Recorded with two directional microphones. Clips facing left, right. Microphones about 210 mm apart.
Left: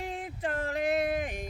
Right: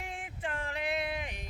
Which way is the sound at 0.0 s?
35° left (ahead or behind).